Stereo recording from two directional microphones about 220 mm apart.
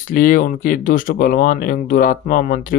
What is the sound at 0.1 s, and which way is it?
Speech, 40° left (ahead or behind).